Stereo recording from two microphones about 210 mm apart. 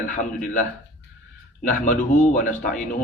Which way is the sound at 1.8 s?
35° left (ahead or behind).